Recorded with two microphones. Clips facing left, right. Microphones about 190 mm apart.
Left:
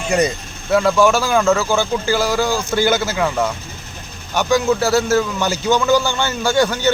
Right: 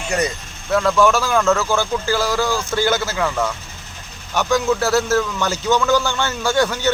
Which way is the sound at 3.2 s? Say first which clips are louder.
Left 2 dB; 15° left (ahead or behind).